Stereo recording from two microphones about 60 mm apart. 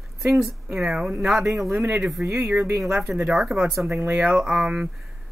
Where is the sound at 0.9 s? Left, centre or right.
Centre.